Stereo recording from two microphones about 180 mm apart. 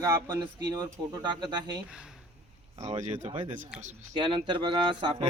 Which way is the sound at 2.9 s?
35° right (ahead or behind).